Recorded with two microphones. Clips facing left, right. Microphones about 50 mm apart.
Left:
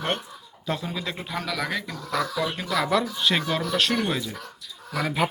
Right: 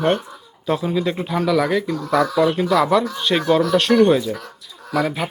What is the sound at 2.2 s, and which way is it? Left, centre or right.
Speech, right.